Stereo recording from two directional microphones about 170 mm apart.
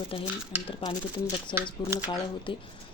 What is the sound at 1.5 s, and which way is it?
Speech, 30° left (ahead or behind).